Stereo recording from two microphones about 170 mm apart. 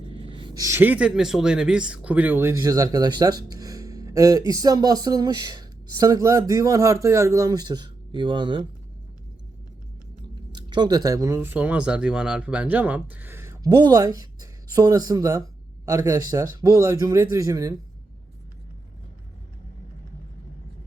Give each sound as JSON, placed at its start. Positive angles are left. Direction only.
{"t": 0.2, "sound": "speech", "side_deg": -30}
{"t": 10.5, "sound": "speech", "side_deg": -25}